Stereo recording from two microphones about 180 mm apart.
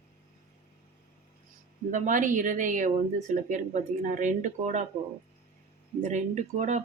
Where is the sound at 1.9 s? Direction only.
45° right (ahead or behind).